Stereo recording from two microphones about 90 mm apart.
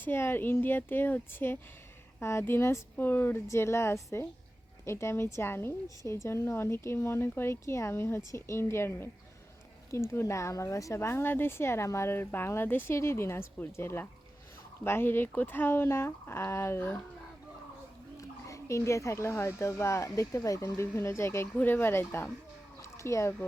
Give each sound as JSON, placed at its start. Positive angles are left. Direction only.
{"t": 0.0, "sound": "a woman's voice", "side_deg": 25}
{"t": 18.2, "sound": "speech", "side_deg": 35}
{"t": 20.7, "sound": "a woman's voice", "side_deg": 30}
{"t": 22.8, "sound": "a sound", "side_deg": 35}